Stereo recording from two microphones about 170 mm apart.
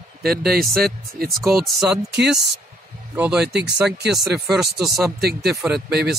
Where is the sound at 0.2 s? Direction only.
65° right (ahead or behind).